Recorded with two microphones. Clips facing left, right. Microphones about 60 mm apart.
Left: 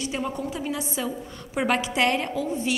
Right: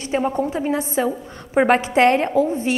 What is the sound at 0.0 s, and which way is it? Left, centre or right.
A woman's voice, right.